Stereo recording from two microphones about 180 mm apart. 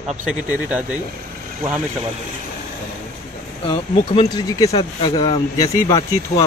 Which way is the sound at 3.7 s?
25° left (ahead or behind).